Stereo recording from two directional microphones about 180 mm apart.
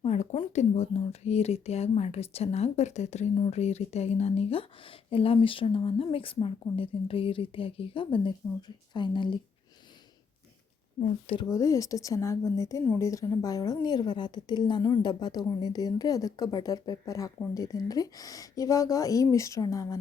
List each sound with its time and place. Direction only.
0.0 s a woman's voice: 40° left (ahead or behind)
11.0 s speech: 35° left (ahead or behind)
11.4 s a woman's voice: 20° left (ahead or behind)